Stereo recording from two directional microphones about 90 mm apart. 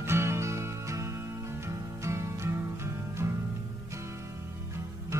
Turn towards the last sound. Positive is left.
turn(degrees=-30)  # may be behind; listen again after turning